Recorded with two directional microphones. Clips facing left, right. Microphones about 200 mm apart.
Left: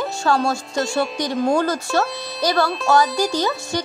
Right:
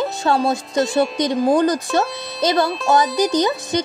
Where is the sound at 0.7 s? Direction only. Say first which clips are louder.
Right 6 dB; centre (ahead or behind).